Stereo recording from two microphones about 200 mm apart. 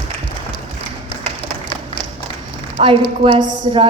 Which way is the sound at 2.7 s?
25° right (ahead or behind).